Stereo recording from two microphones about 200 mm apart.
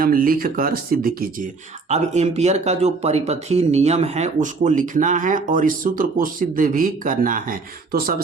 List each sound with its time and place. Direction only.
0.0 s speech: 45° right (ahead or behind)
1.9 s speech: 35° right (ahead or behind)